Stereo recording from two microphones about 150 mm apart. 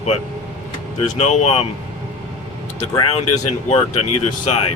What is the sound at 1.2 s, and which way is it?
Speech, 45° left (ahead or behind).